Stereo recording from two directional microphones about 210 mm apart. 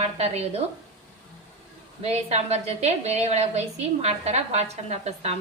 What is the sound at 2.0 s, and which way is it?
A woman's voice, 30° right (ahead or behind).